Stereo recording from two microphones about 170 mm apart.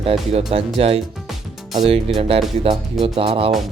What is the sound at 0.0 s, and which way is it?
Speech, 35° right (ahead or behind).